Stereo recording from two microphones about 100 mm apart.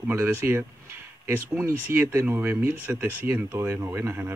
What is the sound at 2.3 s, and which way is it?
Speech, 15° right (ahead or behind).